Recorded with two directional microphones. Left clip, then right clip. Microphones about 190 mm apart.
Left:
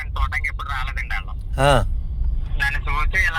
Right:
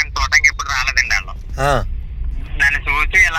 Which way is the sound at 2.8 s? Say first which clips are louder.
Right 8 dB; 65° right (ahead or behind).